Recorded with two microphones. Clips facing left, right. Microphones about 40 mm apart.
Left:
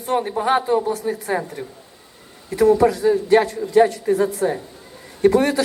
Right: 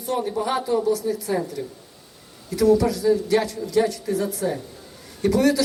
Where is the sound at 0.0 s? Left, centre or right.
Left.